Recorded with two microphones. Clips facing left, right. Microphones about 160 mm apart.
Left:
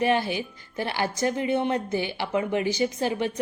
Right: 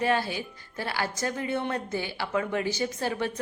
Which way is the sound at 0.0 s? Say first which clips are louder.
Left 3 dB; 20° left (ahead or behind).